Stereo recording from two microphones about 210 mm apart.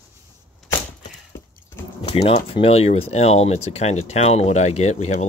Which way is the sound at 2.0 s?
25° left (ahead or behind).